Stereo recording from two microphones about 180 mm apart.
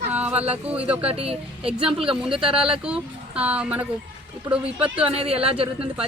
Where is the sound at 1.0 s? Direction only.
35° right (ahead or behind).